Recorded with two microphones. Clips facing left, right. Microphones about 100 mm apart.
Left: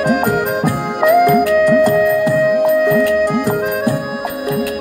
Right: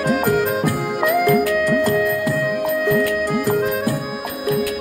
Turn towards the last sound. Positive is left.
turn(degrees=20)  # may be behind; listen again after turning